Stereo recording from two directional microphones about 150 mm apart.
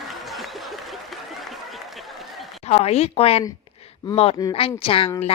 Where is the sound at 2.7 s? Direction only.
45° left (ahead or behind).